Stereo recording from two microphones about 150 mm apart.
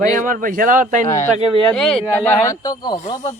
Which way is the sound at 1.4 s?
40° right (ahead or behind).